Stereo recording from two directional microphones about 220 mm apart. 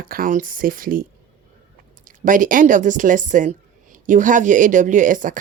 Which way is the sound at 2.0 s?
35° right (ahead or behind).